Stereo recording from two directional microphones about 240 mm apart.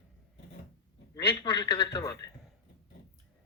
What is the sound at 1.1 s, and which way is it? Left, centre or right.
A man's voice, centre.